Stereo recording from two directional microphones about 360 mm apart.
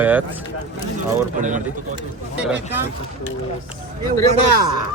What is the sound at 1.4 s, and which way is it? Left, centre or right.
Speech, right.